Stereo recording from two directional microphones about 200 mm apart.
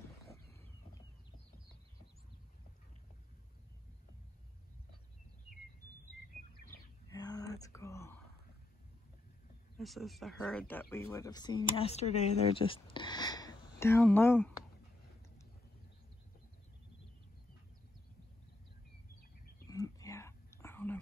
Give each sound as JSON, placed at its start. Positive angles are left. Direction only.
{"t": 0.2, "sound": "wild animals", "side_deg": 15}
{"t": 7.1, "sound": "whispering", "side_deg": 20}
{"t": 9.8, "sound": "speech", "side_deg": 0}
{"t": 19.7, "sound": "whispering", "side_deg": 15}